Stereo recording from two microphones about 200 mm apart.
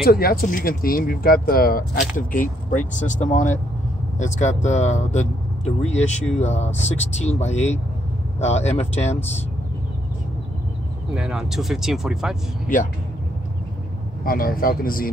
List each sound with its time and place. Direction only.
0.0 s speech: 50° left (ahead or behind); by 9.2 s 35° left (ahead or behind)
11.1 s speech: 5° right (ahead or behind)
14.2 s speech: 45° left (ahead or behind)